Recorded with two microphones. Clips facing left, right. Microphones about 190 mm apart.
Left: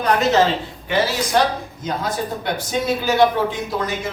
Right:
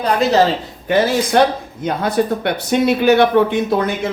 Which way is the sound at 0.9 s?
50° right (ahead or behind).